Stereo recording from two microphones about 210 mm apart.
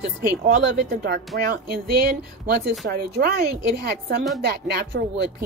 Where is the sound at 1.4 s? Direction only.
45° right (ahead or behind).